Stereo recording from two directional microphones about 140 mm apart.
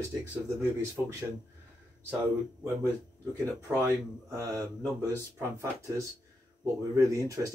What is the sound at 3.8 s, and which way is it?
Speech, 25° right (ahead or behind).